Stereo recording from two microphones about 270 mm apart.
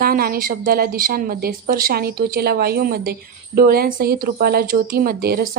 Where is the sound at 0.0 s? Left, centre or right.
Right.